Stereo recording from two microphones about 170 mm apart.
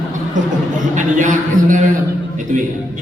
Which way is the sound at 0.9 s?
50° right (ahead or behind).